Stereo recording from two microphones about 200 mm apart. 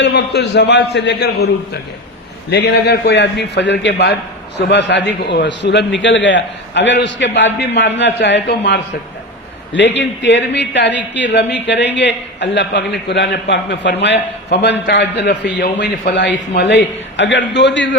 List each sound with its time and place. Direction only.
0.0 s a man's voice: 60° left (ahead or behind)
2.5 s a man's voice: 60° left (ahead or behind)